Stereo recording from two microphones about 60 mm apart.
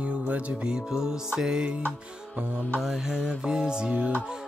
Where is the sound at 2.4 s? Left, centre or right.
Right.